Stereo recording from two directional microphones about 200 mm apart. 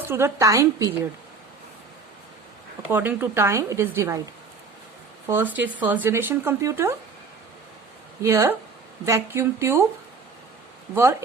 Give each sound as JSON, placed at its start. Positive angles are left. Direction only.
{"t": 0.1, "sound": "a woman's voice", "side_deg": -15}
{"t": 2.9, "sound": "a woman's voice", "side_deg": -10}
{"t": 5.3, "sound": "a woman's voice", "side_deg": -10}
{"t": 8.2, "sound": "a woman's voice", "side_deg": -15}